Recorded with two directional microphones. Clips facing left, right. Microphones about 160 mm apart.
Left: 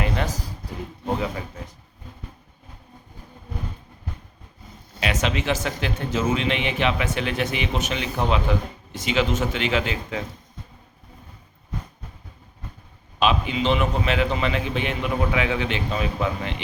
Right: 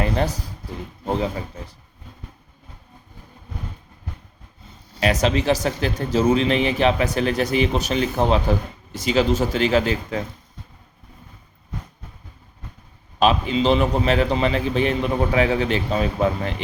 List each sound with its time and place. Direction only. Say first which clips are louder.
4.9 s a man's voice: right 5 dB; 35° right (ahead or behind)
13.1 s a man's voice: right 3 dB; 35° right (ahead or behind)